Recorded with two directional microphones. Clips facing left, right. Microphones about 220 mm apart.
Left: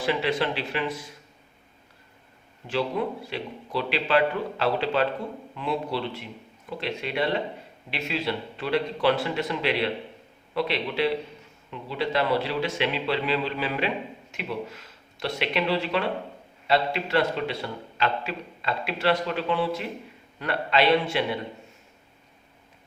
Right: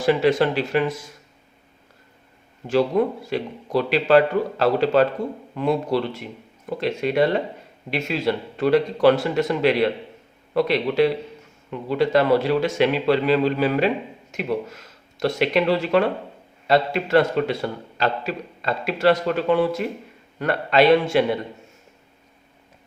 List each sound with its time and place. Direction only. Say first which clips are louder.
0.0 s a man's voice: right 7 dB; 45° right (ahead or behind)
2.6 s a man's voice: right 8 dB; 45° right (ahead or behind)